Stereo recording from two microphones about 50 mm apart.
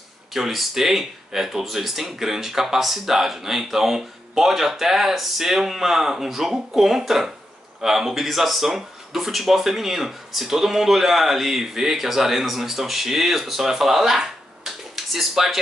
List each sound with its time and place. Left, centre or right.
0.3 s speech: centre